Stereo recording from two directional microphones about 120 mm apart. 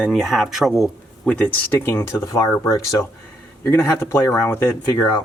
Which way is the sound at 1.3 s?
15° left (ahead or behind).